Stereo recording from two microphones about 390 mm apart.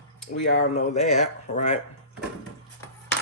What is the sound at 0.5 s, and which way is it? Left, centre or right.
Speech, centre.